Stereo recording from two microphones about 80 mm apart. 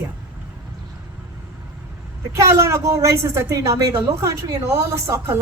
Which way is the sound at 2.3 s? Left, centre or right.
Right.